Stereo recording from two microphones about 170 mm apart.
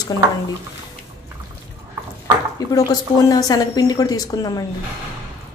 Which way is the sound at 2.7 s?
20° left (ahead or behind).